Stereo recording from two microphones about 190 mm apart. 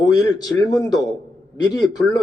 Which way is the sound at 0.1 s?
20° left (ahead or behind).